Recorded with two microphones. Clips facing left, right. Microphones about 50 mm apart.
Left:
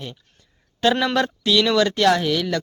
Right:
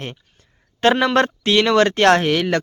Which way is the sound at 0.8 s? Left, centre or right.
Right.